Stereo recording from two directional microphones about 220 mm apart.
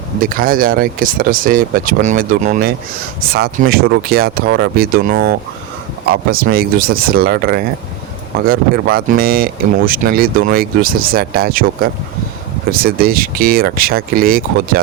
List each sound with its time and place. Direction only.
0.2 s speech: 40° right (ahead or behind)